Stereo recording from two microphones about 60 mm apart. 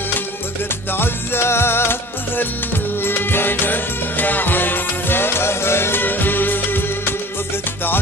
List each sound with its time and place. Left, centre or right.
0.9 s music: left